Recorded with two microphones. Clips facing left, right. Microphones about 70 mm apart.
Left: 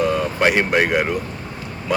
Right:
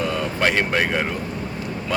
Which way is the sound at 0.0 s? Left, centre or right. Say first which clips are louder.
Left 4 dB; centre.